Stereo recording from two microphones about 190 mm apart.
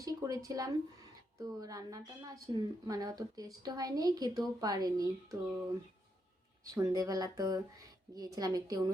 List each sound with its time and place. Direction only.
0.0 s a woman's voice: 20° right (ahead or behind)
6.7 s a woman's voice: 15° right (ahead or behind)